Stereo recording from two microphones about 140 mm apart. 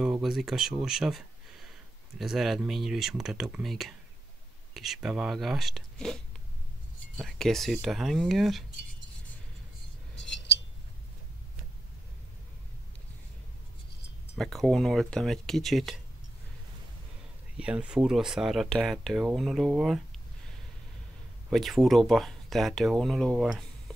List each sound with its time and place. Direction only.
0.0 s speech: 5° right (ahead or behind)
7.2 s speech: 5° left (ahead or behind)
14.3 s speech: centre (ahead or behind)
17.6 s speech: 10° right (ahead or behind)
21.5 s speech: centre (ahead or behind)